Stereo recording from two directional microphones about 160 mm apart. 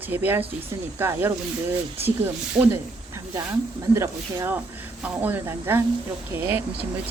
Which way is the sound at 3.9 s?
15° right (ahead or behind).